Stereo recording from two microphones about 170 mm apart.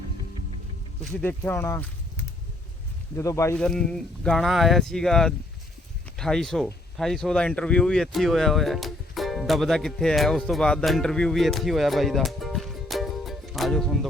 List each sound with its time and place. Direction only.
1.1 s speech: 10° left (ahead or behind)
3.6 s speech: 5° left (ahead or behind)